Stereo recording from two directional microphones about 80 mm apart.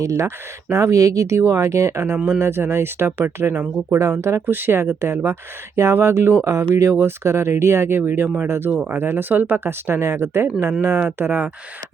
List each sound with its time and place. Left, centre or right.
0.0 s speech: right
4.2 s speech: right
8.7 s speech: centre
9.0 s speech: right